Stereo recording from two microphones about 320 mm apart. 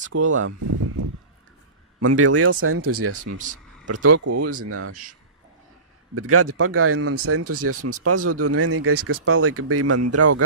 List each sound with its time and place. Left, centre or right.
0.3 s speech: right
6.1 s speech: right